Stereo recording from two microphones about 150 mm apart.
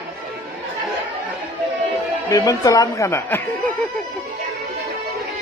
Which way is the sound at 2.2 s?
20° left (ahead or behind).